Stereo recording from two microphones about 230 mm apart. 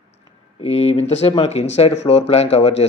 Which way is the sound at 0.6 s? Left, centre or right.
Left.